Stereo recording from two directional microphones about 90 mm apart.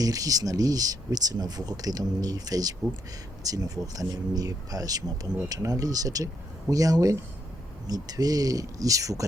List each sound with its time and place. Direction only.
0.0 s speech: 40° right (ahead or behind)